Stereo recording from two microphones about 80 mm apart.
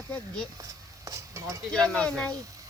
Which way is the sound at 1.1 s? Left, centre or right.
Right.